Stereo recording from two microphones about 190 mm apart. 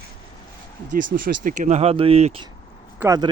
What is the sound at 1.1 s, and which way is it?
Speech, 45° right (ahead or behind).